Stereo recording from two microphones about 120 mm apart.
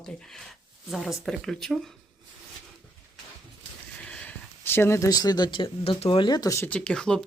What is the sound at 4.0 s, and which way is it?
Speech, 10° left (ahead or behind).